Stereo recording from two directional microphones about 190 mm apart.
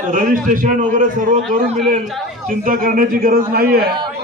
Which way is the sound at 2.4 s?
45° right (ahead or behind).